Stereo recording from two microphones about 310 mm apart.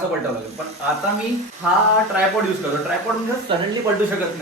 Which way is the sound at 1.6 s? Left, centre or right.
Centre.